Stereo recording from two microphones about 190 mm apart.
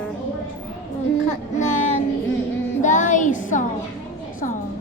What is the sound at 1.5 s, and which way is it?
Speech, 40° left (ahead or behind).